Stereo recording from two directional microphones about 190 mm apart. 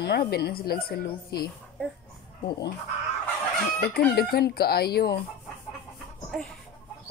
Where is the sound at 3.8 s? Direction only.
55° left (ahead or behind).